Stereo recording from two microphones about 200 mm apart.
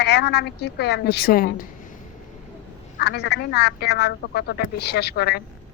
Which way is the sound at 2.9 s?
55° left (ahead or behind).